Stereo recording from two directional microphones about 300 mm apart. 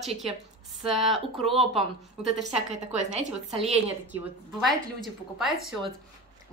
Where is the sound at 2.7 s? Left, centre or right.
Right.